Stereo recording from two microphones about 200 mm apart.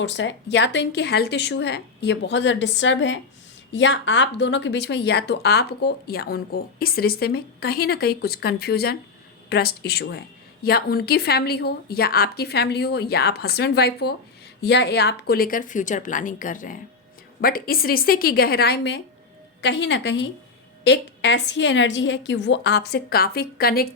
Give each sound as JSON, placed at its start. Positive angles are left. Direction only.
{"t": 0.0, "sound": "a woman's voice", "side_deg": 65}